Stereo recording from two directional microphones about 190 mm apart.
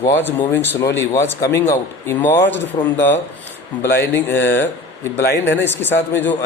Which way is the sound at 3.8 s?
10° left (ahead or behind).